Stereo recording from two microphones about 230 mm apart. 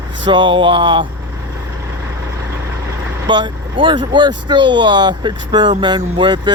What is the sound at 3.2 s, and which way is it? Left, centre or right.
Speech, centre.